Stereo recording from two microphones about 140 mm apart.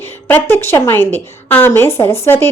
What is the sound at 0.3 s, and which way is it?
A woman's voice, 15° left (ahead or behind).